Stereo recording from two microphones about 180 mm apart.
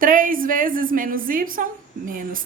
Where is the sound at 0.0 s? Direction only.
50° right (ahead or behind).